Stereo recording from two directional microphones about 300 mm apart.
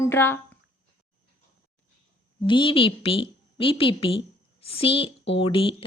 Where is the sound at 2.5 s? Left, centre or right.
Centre.